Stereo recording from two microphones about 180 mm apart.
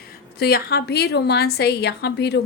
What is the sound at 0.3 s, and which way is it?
A woman's voice, 60° left (ahead or behind).